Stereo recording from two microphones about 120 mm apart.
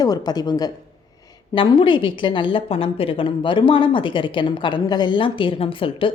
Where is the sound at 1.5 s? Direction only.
45° left (ahead or behind).